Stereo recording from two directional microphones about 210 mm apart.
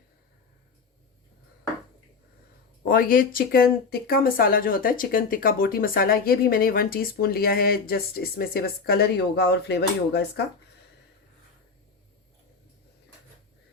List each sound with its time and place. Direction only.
2.8 s speech: 45° left (ahead or behind)